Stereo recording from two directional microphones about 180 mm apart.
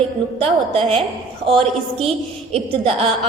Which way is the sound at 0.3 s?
30° right (ahead or behind).